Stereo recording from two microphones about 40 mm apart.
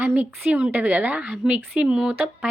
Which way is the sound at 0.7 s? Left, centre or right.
Right.